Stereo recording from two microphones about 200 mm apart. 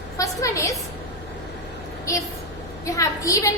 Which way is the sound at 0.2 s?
15° left (ahead or behind).